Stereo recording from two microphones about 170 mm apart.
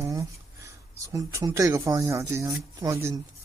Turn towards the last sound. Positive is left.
turn(degrees=-15)  # may be behind; listen again after turning